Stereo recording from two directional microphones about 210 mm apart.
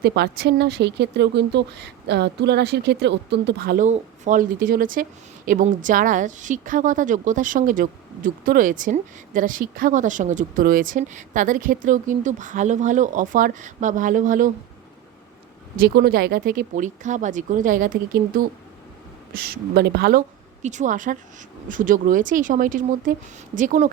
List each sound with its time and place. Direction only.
0.0 s a woman's voice: 50° right (ahead or behind)
15.8 s a woman's voice: 45° right (ahead or behind)